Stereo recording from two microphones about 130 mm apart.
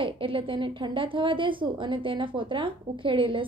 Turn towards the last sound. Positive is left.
turn(degrees=-40)  # may be behind; listen again after turning